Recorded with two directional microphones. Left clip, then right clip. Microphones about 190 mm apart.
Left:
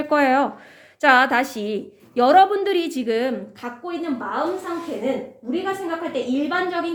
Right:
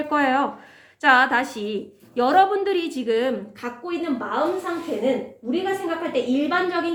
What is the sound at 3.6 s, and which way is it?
Speech, 10° left (ahead or behind).